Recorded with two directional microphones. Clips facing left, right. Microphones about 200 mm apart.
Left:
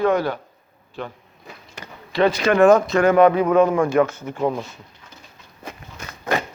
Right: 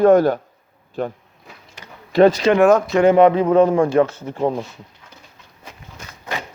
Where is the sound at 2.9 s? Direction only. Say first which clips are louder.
Right 2 dB; 25° right (ahead or behind).